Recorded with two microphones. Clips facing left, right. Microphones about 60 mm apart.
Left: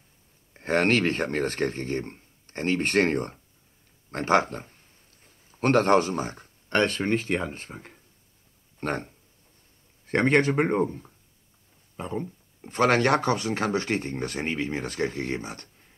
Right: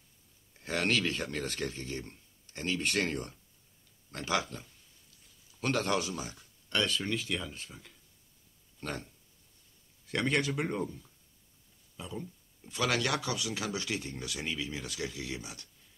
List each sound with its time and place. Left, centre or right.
0.6 s a man's voice: left